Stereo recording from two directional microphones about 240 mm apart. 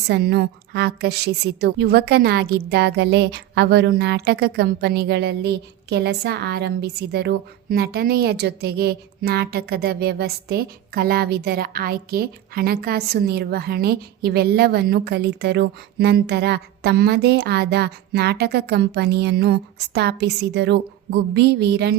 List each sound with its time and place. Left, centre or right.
0.1 s a woman's voice: right